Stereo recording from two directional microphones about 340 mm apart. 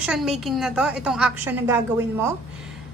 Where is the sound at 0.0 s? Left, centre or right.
Centre.